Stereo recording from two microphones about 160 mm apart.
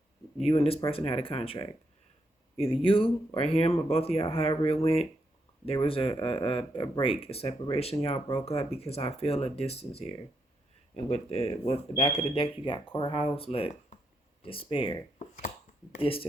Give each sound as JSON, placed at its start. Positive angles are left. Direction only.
{"t": 0.4, "sound": "speech", "side_deg": 40}
{"t": 2.8, "sound": "speech", "side_deg": 35}
{"t": 15.2, "sound": "finger snapping", "side_deg": 50}
{"t": 16.0, "sound": "speech", "side_deg": 35}